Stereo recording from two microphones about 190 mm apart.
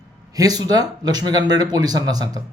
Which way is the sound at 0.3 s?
20° right (ahead or behind).